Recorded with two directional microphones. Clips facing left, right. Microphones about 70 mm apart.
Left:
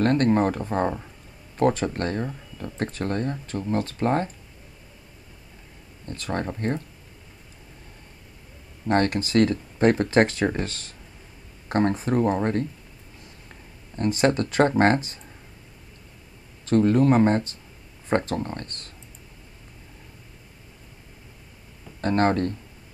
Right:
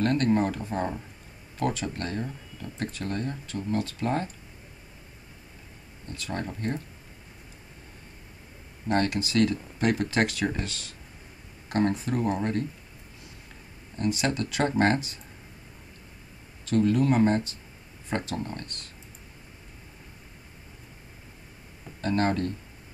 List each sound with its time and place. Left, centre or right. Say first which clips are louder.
0.0 s speech: left 4 dB; left
6.0 s speech: left 5 dB; left
8.8 s speech: left 4 dB; left
13.9 s speech: left 6 dB; left
16.6 s speech: left 4 dB; left
22.0 s speech: left 4 dB; left